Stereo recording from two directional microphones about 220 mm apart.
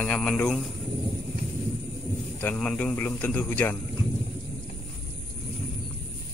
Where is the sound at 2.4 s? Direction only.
5° left (ahead or behind).